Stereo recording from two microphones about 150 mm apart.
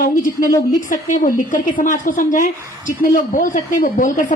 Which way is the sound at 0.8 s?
65° left (ahead or behind).